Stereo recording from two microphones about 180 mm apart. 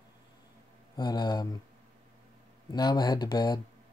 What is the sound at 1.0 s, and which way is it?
Speech, 25° left (ahead or behind).